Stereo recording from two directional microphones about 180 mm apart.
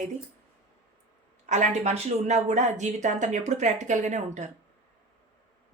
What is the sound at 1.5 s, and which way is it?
Speech, 40° right (ahead or behind).